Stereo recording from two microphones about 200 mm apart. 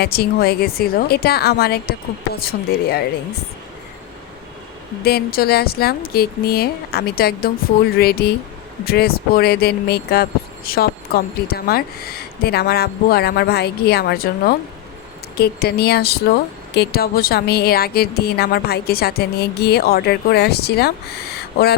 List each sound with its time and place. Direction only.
0.0 s speech: 50° left (ahead or behind)
5.0 s speech: 50° left (ahead or behind)
21.3 s owl: 55° left (ahead or behind)